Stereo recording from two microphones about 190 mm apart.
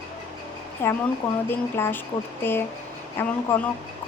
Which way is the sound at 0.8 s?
10° left (ahead or behind).